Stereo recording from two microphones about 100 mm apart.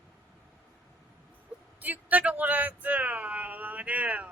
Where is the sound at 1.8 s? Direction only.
15° right (ahead or behind).